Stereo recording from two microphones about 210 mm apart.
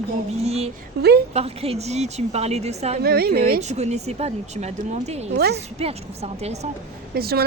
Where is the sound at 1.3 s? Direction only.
30° right (ahead or behind).